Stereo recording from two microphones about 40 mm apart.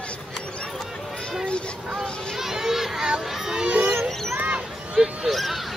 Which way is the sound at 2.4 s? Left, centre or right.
Centre.